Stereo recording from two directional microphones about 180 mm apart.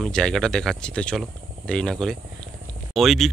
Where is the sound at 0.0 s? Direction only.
5° left (ahead or behind).